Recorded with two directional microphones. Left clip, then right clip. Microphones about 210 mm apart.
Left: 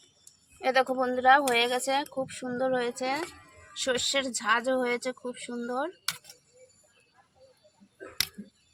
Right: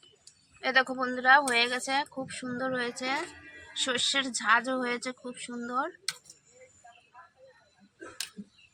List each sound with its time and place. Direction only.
0.6 s speech: 55° left (ahead or behind)